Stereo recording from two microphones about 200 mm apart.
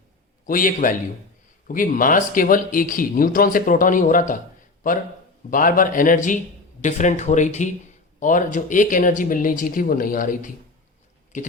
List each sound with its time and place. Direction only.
0.4 s speech: 45° left (ahead or behind)
5.5 s speech: 45° left (ahead or behind)